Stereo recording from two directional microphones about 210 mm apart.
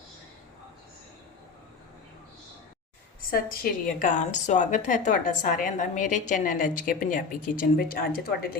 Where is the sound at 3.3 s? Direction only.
45° left (ahead or behind).